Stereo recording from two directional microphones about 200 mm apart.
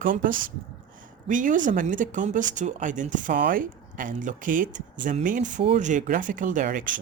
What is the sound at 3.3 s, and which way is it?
Speech, 55° right (ahead or behind).